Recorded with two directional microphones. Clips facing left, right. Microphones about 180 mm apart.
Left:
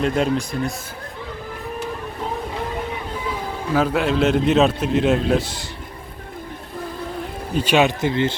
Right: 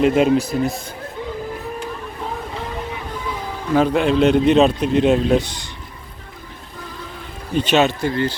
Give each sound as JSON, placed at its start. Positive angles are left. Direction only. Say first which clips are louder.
{"t": 0.0, "sound": "a man's voice", "louder": "right 5 dB", "side_deg": -5}
{"t": 3.8, "sound": "a man's voice", "louder": "right 3 dB", "side_deg": 5}
{"t": 7.5, "sound": "speech", "louder": "right 1 dB", "side_deg": 10}